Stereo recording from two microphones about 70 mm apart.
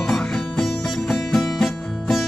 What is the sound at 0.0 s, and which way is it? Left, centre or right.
Music, centre.